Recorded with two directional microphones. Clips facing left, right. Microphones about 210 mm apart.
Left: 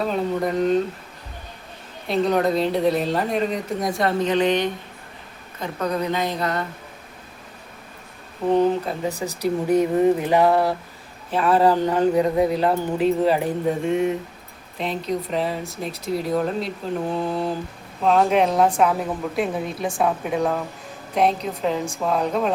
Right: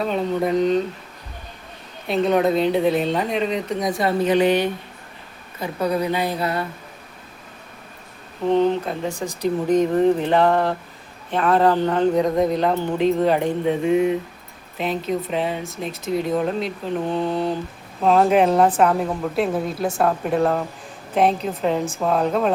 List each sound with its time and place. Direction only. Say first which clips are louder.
0.0 s speech: right 1 dB; centre (ahead or behind)
2.0 s a woman's voice: right 2 dB; centre (ahead or behind)
8.4 s speech: even; 5° left (ahead or behind)
9.0 s speech: even; 35° left (ahead or behind)
9.4 s speech: right 1 dB; 10° left (ahead or behind)